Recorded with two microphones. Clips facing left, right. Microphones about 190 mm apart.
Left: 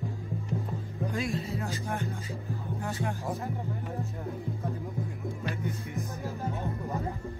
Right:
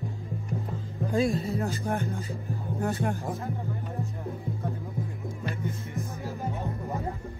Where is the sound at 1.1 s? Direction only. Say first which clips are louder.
Right 8 dB; 35° right (ahead or behind).